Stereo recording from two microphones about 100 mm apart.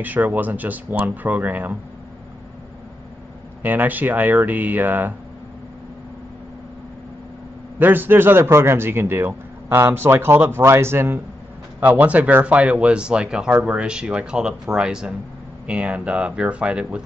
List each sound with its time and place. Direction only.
0.0 s speech: 15° right (ahead or behind)
3.6 s speech: 20° right (ahead or behind)
7.8 s a man's voice: 20° right (ahead or behind)